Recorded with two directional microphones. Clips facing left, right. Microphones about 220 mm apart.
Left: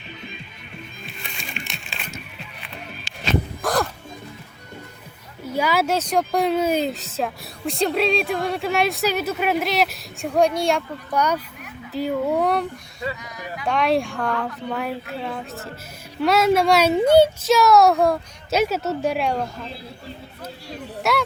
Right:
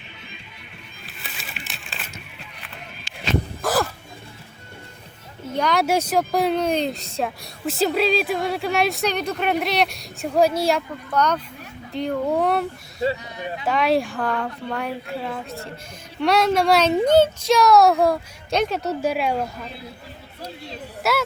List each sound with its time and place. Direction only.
1.0 s music: 5° right (ahead or behind)
3.6 s music: centre (ahead or behind)
5.5 s speech: 5° left (ahead or behind)
5.8 s speech: 10° right (ahead or behind)
11.1 s speech: 10° left (ahead or behind)
13.0 s a sound: 25° right (ahead or behind)
13.7 s speech: centre (ahead or behind)
21.0 s music: centre (ahead or behind)